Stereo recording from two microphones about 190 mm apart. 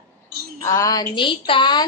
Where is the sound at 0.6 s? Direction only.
15° left (ahead or behind).